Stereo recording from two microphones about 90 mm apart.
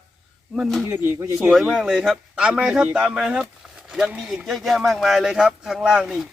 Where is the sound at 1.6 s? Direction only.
10° right (ahead or behind).